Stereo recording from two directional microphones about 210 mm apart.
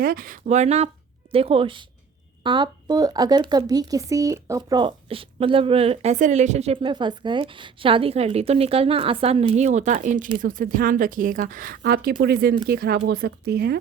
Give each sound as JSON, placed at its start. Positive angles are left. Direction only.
{"t": 0.0, "sound": "a woman's voice", "side_deg": -45}